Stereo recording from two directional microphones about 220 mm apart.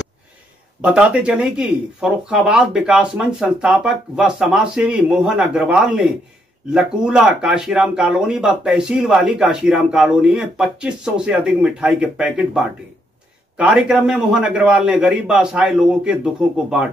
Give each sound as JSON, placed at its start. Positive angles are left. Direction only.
{"t": 0.8, "sound": "speech", "side_deg": -5}